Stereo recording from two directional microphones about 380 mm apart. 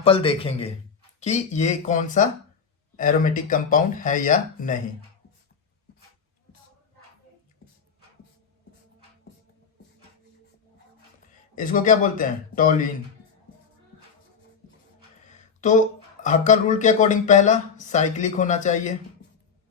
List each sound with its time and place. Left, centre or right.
0.0 s speech: centre
11.5 s speech: left
16.2 s speech: centre